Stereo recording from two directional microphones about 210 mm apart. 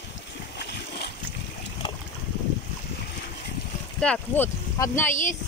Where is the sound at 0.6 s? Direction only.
50° left (ahead or behind).